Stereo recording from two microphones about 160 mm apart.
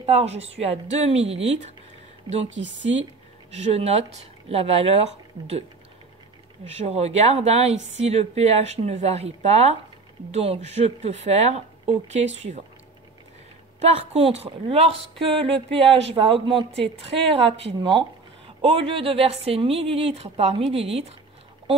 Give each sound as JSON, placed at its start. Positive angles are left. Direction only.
{"t": 0.0, "sound": "speech", "side_deg": -40}
{"t": 3.5, "sound": "speech", "side_deg": -40}
{"t": 6.7, "sound": "speech", "side_deg": -40}
{"t": 13.8, "sound": "speech", "side_deg": -40}